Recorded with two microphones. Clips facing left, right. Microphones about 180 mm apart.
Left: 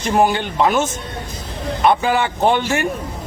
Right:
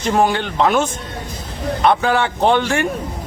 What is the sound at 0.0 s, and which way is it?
A man's voice, 5° left (ahead or behind).